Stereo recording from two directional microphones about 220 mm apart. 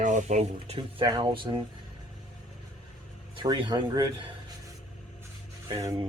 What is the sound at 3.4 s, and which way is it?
Speech, 20° right (ahead or behind).